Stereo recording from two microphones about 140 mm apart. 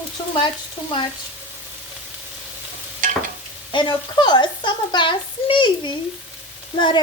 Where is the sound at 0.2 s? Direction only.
30° left (ahead or behind).